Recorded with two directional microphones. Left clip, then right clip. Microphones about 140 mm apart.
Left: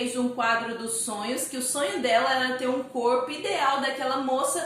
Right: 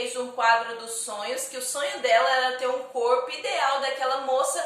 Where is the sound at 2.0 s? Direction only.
20° right (ahead or behind).